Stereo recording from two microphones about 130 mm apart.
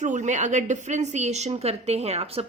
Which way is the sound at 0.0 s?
65° right (ahead or behind).